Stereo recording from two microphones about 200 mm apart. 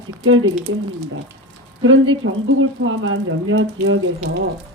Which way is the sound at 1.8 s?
80° right.